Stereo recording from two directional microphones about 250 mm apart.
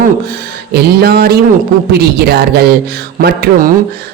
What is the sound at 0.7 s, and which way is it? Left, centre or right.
A man's voice, right.